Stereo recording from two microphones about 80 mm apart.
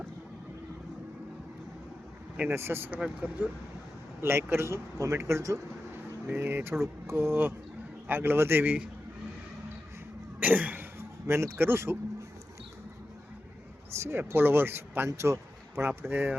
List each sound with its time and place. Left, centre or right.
2.5 s a man's voice: right
10.4 s cough: right
11.3 s a man's voice: right
14.0 s a man's voice: right